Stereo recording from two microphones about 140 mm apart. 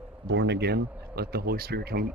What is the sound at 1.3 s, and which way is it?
Speech, 90° right.